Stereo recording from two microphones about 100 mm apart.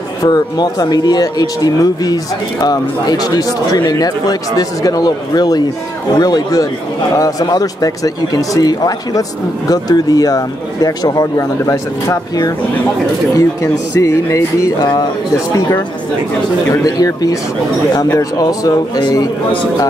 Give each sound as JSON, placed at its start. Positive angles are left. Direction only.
{"t": 0.2, "sound": "speech", "side_deg": 40}
{"t": 16.7, "sound": "speech", "side_deg": 35}